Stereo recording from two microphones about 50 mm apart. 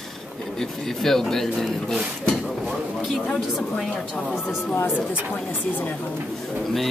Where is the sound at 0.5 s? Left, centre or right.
Centre.